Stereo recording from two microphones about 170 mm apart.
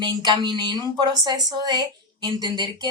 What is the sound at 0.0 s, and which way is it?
Speech, 25° right (ahead or behind).